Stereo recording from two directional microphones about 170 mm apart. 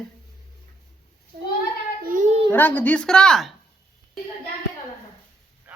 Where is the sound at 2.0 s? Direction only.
55° right (ahead or behind).